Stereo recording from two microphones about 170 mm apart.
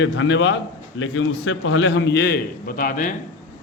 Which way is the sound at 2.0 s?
85° left.